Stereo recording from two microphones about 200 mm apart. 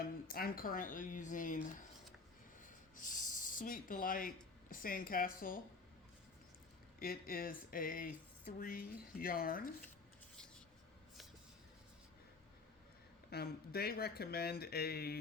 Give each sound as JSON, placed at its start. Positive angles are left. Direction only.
{"t": 0.3, "sound": "speech", "side_deg": 45}
{"t": 2.9, "sound": "a sound", "side_deg": 40}
{"t": 4.7, "sound": "speech", "side_deg": 45}
{"t": 7.0, "sound": "speech", "side_deg": 50}
{"t": 13.3, "sound": "speech", "side_deg": 50}